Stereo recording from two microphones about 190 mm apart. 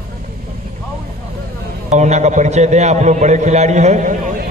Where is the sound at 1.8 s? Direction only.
40° right (ahead or behind).